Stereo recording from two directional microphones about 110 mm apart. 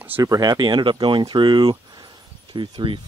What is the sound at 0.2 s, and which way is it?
Speech, 35° right (ahead or behind).